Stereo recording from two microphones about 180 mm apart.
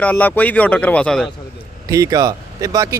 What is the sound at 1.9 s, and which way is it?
Speech, 20° right (ahead or behind).